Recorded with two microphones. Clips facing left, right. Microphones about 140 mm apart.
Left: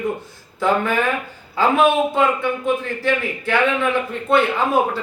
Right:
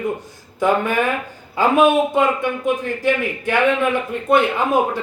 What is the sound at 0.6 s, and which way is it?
A man's voice, 15° right (ahead or behind).